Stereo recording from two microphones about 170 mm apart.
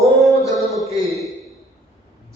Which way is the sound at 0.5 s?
Centre (ahead or behind).